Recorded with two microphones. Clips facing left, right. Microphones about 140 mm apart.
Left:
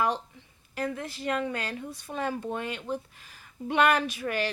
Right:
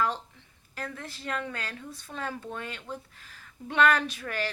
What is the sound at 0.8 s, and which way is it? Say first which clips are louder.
Speech: left 6 dB; 15° left (ahead or behind).